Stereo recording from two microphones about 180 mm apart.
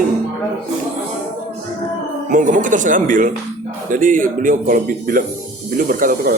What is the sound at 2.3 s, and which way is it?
Speech, 45° right (ahead or behind).